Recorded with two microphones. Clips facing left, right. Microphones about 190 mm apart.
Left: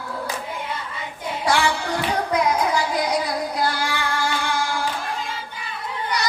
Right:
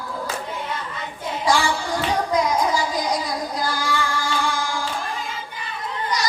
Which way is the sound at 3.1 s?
65° left (ahead or behind).